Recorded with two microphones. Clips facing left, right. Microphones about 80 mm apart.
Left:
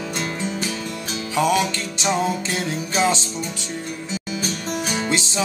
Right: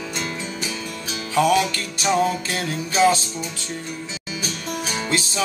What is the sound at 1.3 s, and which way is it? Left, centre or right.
Music, centre.